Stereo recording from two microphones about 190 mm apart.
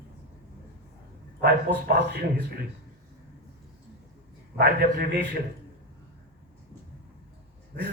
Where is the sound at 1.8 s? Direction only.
65° right (ahead or behind).